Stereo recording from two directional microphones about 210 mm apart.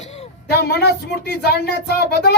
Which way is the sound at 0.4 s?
50° left (ahead or behind).